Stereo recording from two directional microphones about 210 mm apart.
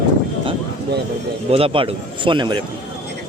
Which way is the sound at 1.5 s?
25° right (ahead or behind).